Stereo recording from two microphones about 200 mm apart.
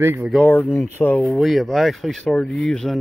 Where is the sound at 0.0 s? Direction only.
10° right (ahead or behind).